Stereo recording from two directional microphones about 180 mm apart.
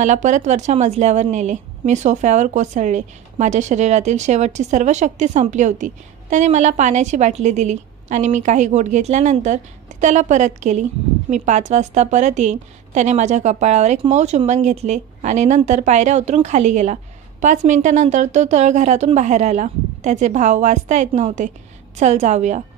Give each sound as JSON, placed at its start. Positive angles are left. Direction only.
{"t": 0.0, "sound": "a woman's voice", "side_deg": -40}